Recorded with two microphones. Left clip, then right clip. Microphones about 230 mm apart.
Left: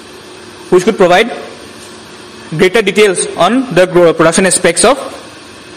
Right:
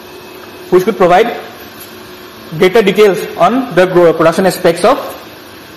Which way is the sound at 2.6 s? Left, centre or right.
Left.